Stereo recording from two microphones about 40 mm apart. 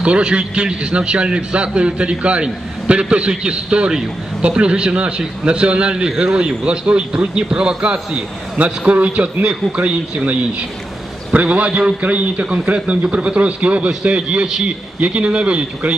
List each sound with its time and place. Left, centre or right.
0.0 s a man's voice: right
15.0 s a man's voice: right